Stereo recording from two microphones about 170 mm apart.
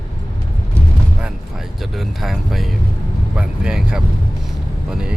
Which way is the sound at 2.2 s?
Centre (ahead or behind).